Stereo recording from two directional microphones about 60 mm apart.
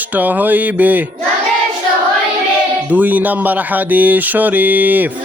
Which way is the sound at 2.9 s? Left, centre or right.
Right.